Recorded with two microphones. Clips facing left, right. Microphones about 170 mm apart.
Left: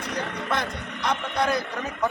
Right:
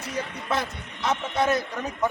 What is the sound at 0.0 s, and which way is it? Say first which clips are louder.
Vehicle: left 1 dB; 65° left (ahead or behind).